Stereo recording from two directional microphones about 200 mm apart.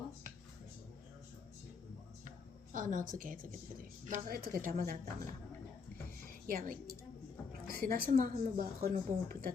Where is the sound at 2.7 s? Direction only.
40° right (ahead or behind).